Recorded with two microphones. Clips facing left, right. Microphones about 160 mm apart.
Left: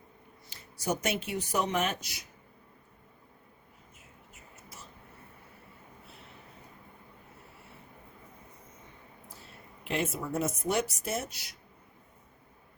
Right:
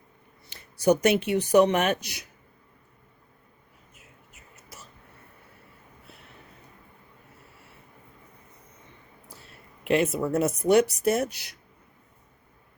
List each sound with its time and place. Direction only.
0.5 s speech: 70° right (ahead or behind)
9.8 s speech: 70° right (ahead or behind)